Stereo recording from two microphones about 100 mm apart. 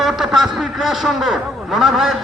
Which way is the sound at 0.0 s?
5° right (ahead or behind).